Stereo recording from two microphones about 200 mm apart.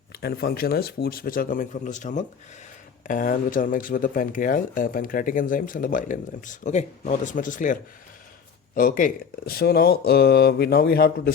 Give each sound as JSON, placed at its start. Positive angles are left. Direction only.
{"t": 0.1, "sound": "speech", "side_deg": 55}